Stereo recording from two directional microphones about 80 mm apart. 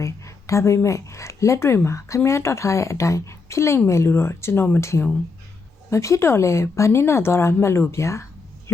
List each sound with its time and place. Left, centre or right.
0.0 s speech: left